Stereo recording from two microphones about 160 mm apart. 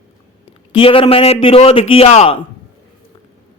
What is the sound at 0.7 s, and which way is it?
A man's voice, 35° left (ahead or behind).